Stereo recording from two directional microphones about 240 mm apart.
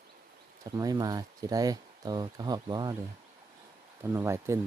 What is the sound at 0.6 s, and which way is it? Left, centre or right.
Speech, centre.